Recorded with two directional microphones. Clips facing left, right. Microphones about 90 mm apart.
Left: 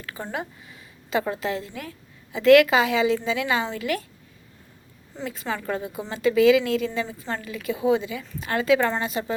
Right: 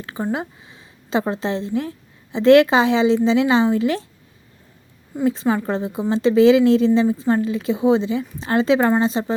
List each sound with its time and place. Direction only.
0.0 s a woman's voice: 25° right (ahead or behind)
5.2 s a woman's voice: 25° right (ahead or behind)